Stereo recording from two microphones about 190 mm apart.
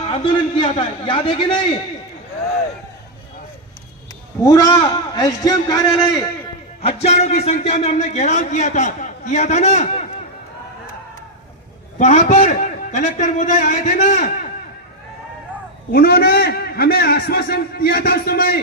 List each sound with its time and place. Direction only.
0.1 s a man's voice: 25° left (ahead or behind)
4.4 s a man's voice: 20° left (ahead or behind)
6.8 s a man's voice: 35° left (ahead or behind)
11.9 s a man's voice: 40° left (ahead or behind)
15.9 s a man's voice: 55° left (ahead or behind)